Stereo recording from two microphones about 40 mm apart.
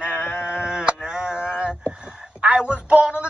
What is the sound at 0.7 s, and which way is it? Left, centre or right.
Sheep, right.